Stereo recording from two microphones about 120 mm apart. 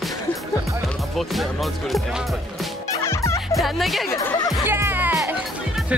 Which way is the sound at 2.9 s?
25° left (ahead or behind).